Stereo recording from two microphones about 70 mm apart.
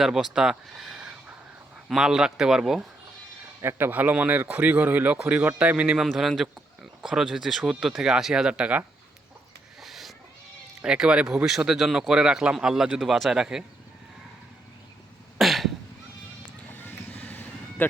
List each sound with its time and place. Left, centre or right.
0.0 s a man's voice: centre
3.6 s speech: right
6.1 s a man's voice: centre
9.8 s a sound: centre
10.8 s a man's voice: centre
11.4 s a man's voice: centre
15.4 s cough: centre
16.6 s vehicle: left